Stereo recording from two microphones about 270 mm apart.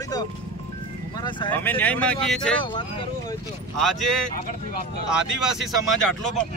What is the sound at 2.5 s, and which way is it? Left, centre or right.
Speech, centre.